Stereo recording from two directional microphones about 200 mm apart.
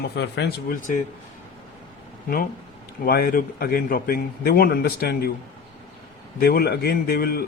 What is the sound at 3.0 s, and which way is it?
Speech, 45° left (ahead or behind).